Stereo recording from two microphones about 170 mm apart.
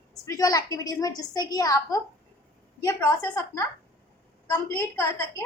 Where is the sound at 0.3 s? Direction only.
20° left (ahead or behind).